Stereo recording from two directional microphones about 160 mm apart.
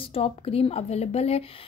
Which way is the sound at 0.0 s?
35° left (ahead or behind).